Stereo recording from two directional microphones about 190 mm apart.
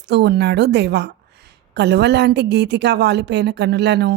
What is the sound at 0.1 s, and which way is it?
Speech, 60° right (ahead or behind).